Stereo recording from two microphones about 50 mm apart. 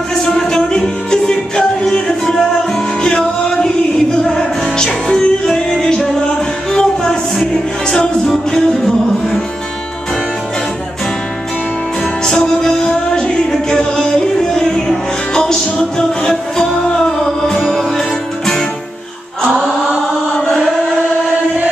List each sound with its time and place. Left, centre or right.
0.2 s music: centre
12.3 s music: centre